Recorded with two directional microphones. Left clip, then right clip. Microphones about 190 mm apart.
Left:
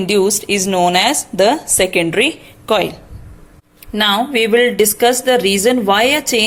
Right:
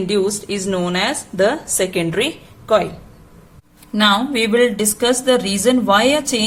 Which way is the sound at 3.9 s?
30° left (ahead or behind).